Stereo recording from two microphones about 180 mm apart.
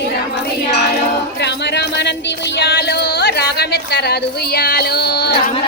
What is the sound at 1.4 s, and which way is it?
Music, 70° left (ahead or behind).